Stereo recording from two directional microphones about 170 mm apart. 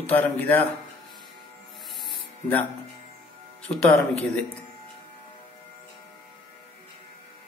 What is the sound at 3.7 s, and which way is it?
Speech, 5° left (ahead or behind).